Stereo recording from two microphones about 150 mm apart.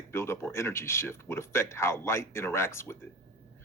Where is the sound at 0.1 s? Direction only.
15° left (ahead or behind).